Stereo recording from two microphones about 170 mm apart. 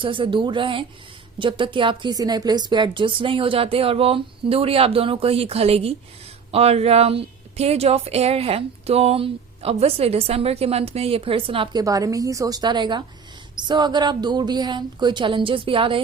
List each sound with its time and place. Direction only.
0.0 s a woman's voice: 30° right (ahead or behind)